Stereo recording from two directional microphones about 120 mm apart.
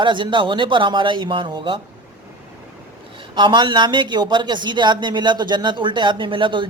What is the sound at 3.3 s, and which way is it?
Speech, 40° right (ahead or behind).